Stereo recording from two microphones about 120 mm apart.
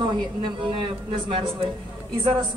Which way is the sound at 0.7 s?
45° right (ahead or behind).